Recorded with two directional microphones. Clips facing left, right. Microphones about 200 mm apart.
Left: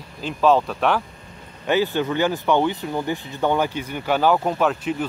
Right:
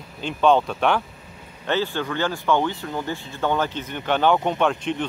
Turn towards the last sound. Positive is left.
turn(degrees=5)  # may be behind; listen again after turning